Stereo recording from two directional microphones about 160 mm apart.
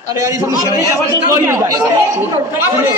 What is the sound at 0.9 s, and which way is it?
Speech, 20° right (ahead or behind).